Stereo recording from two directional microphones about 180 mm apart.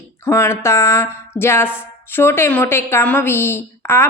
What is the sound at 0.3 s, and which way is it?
A woman's voice, 15° left (ahead or behind).